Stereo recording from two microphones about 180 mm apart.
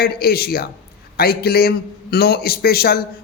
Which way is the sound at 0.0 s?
60° left (ahead or behind).